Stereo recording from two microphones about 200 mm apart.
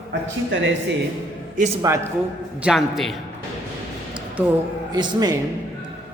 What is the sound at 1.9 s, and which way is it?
Speech, 15° right (ahead or behind).